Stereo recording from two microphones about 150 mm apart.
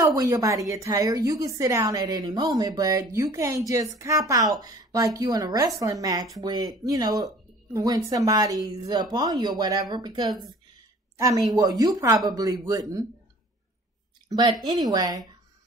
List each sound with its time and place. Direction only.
0.0 s a woman's voice: 20° right (ahead or behind)
14.7 s a woman's voice: 25° right (ahead or behind)